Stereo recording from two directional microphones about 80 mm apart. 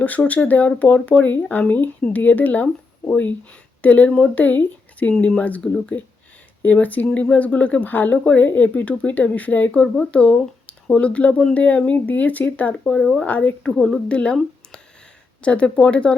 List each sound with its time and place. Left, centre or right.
0.0 s speech: centre
3.8 s speech: left
9.8 s speech: centre
12.8 s speech: centre
13.2 s speech: centre
13.7 s a woman's voice: centre
14.1 s speech: centre
15.4 s speech: centre